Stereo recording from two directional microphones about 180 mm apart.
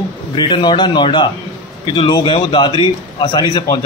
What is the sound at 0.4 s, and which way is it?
A man's voice, 25° left (ahead or behind).